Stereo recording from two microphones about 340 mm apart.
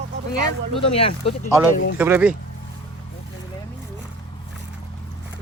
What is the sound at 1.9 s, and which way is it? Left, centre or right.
Speech, centre.